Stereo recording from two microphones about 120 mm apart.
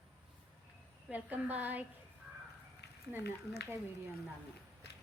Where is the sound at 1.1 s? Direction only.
15° right (ahead or behind).